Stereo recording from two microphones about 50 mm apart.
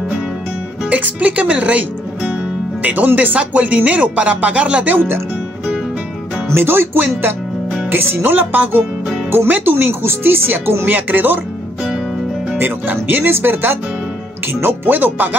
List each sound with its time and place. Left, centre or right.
0.8 s speech: right
4.9 s speech: right
6.5 s speech: right
10.9 s speech: right
12.5 s speech: right